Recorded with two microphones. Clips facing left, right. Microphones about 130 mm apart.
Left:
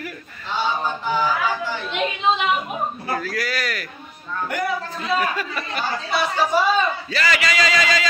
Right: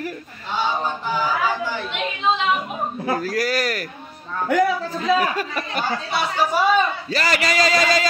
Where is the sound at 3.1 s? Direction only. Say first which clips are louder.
Right 6 dB; 40° right (ahead or behind).